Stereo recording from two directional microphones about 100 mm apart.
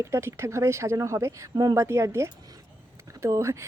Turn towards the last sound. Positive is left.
turn(degrees=-30)  # may be behind; listen again after turning